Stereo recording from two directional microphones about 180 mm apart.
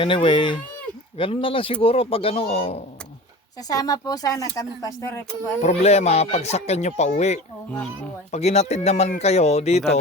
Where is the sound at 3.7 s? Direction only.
20° left (ahead or behind).